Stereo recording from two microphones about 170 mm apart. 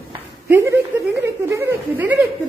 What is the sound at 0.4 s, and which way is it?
Speech, 15° right (ahead or behind).